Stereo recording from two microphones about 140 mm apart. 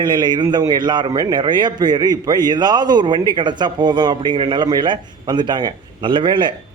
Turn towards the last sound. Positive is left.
turn(degrees=-35)  # may be behind; listen again after turning